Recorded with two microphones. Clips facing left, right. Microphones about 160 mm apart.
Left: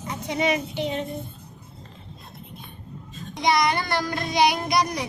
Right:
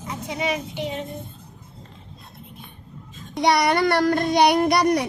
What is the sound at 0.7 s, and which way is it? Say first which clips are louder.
Music: left 1 dB; 10° right (ahead or behind).